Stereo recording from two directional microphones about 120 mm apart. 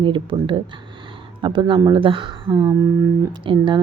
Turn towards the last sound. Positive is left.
turn(degrees=-45)  # may be behind; listen again after turning